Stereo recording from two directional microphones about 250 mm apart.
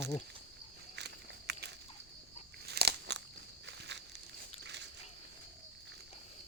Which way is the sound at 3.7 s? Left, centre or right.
Right.